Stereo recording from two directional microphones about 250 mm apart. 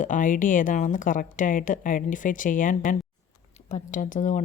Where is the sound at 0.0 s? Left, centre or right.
Left.